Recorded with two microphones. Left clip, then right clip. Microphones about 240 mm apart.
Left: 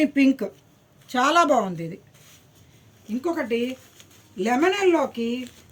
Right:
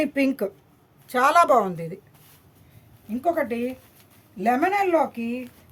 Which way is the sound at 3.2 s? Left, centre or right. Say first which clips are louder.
Right 1 dB; right.